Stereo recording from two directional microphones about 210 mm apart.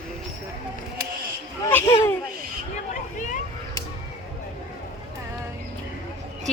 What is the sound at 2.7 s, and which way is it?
Vehicle, 35° left (ahead or behind).